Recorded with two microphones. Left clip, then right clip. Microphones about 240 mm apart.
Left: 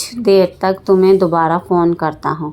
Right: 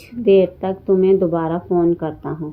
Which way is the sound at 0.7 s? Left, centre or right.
Centre.